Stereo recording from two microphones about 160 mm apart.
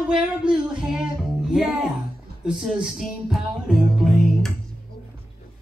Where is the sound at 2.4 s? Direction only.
5° right (ahead or behind).